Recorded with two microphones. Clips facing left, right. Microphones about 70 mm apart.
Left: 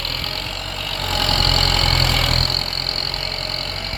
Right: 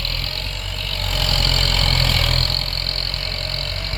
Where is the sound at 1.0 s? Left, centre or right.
Left.